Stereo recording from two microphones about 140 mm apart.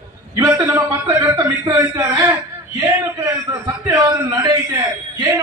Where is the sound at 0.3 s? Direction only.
20° right (ahead or behind).